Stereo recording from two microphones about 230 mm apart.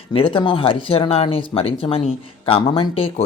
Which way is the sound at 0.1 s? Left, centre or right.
Left.